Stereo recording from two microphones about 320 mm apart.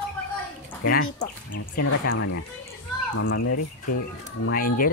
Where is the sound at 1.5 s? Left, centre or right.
Left.